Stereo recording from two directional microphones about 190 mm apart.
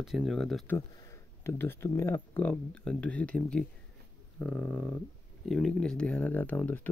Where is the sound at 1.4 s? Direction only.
10° left (ahead or behind).